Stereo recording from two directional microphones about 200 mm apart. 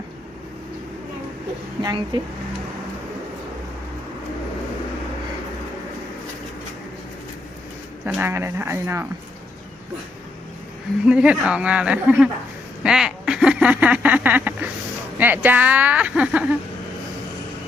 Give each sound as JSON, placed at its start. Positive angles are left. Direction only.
{"t": 1.8, "sound": "speech", "side_deg": -20}
{"t": 8.0, "sound": "speech", "side_deg": -10}
{"t": 11.0, "sound": "speech", "side_deg": -5}
{"t": 12.8, "sound": "duck", "side_deg": -5}
{"t": 15.2, "sound": "speech", "side_deg": -10}